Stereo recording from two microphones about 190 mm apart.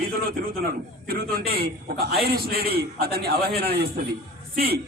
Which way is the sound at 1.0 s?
55° right (ahead or behind).